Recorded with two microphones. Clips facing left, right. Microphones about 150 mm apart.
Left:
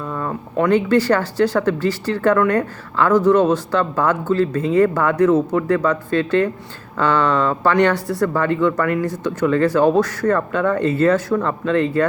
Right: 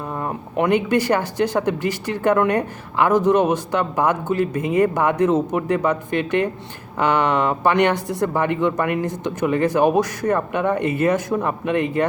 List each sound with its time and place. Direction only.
0.1 s speech: 20° right (ahead or behind)